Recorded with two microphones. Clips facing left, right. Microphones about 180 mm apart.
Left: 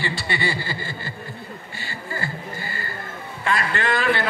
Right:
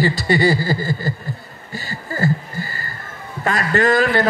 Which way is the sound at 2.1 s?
40° right (ahead or behind).